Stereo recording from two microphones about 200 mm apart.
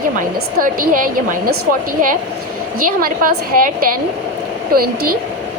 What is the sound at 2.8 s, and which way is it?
Speech, 45° right (ahead or behind).